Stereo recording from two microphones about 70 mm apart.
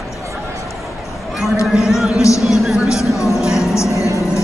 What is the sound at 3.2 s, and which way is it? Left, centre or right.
Music, left.